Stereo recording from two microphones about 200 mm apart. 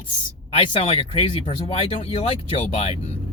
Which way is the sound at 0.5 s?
30° left (ahead or behind).